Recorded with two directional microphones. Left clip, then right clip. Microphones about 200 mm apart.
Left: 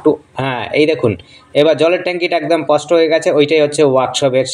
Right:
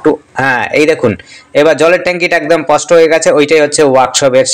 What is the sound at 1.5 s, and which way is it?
Speech, 10° right (ahead or behind).